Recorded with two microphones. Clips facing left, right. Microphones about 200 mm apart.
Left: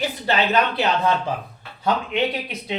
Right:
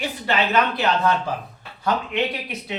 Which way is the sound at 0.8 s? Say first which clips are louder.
Even; 15° left (ahead or behind).